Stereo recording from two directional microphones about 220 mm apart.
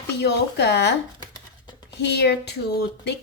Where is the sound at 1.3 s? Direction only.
15° left (ahead or behind).